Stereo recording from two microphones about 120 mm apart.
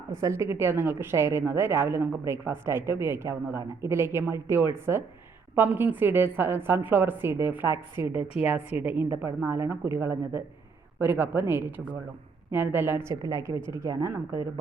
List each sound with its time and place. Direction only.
0.1 s a woman's voice: 25° right (ahead or behind)